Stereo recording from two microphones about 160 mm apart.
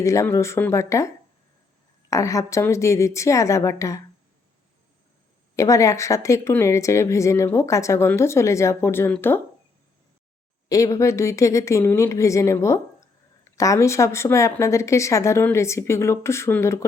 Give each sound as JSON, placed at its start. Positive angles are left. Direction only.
{"t": 0.0, "sound": "speech", "side_deg": 20}
{"t": 5.5, "sound": "a woman's voice", "side_deg": 20}
{"t": 10.7, "sound": "a woman's voice", "side_deg": 20}